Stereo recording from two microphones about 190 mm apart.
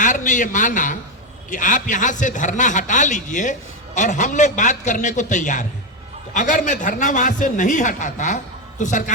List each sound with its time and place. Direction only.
0.0 s a man's voice: 40° left (ahead or behind)